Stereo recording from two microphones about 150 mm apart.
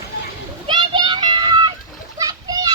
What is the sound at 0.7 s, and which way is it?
Children playing, 30° right (ahead or behind).